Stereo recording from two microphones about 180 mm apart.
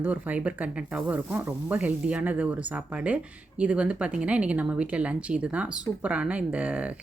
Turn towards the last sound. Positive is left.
turn(degrees=-10)  # may be behind; listen again after turning